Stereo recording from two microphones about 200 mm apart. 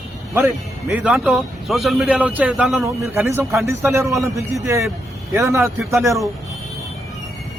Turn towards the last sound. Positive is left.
turn(degrees=-15)  # may be behind; listen again after turning